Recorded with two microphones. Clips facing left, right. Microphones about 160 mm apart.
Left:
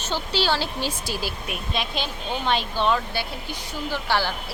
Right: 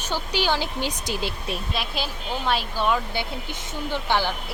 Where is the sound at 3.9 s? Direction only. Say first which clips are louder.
Right 1 dB; 20° right (ahead or behind).